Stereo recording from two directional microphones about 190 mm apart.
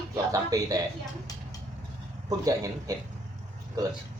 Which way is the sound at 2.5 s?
15° right (ahead or behind).